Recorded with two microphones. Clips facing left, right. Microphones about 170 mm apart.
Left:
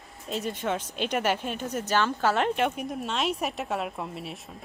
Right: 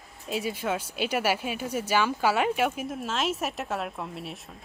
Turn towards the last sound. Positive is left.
turn(degrees=0)  # may be behind; listen again after turning